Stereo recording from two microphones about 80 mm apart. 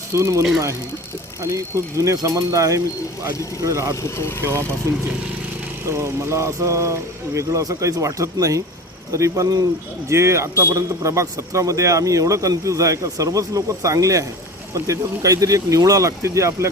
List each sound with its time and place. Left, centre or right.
0.1 s a man's voice: right
4.2 s speech: left
5.8 s a man's voice: right
10.1 s a man's voice: right